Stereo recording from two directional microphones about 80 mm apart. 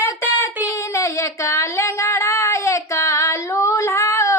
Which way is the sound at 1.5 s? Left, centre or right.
Left.